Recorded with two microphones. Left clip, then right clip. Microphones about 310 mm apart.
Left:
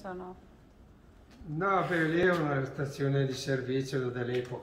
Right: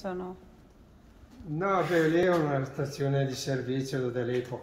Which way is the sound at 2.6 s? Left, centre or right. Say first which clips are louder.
Right 1 dB; right.